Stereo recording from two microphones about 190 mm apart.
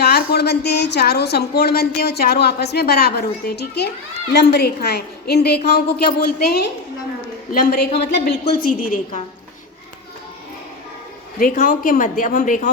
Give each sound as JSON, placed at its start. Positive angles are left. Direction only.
{"t": 0.0, "sound": "a woman's voice", "side_deg": 55}
{"t": 11.3, "sound": "a woman's voice", "side_deg": 45}